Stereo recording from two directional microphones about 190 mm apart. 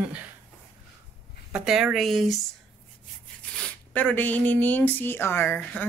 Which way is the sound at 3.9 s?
10° left (ahead or behind).